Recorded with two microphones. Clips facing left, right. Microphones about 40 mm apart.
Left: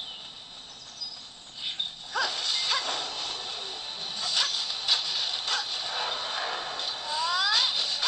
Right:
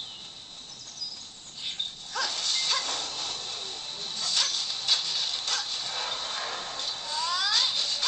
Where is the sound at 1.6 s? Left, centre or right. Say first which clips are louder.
Left 1 dB; centre.